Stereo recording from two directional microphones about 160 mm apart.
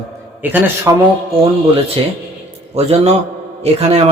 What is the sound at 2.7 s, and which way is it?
A man's voice, 40° right (ahead or behind).